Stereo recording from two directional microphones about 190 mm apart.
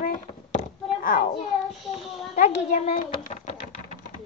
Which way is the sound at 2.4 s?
40° left (ahead or behind).